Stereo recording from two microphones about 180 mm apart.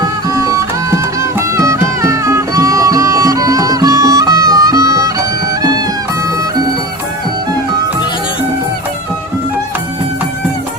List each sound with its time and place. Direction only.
0.0 s music: 20° right (ahead or behind)